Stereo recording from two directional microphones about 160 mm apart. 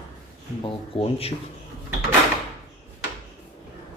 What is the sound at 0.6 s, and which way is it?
Speech, 35° left (ahead or behind).